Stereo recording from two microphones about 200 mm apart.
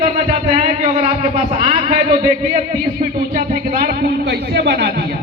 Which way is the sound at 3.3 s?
50° right (ahead or behind).